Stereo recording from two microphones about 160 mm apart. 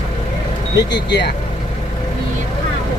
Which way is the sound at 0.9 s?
90° left.